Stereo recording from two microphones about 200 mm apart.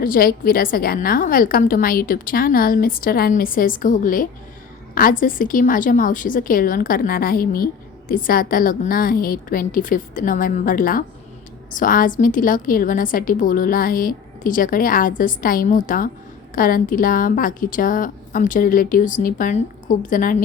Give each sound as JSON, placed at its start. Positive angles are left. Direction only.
{"t": 0.0, "sound": "a woman's voice", "side_deg": 45}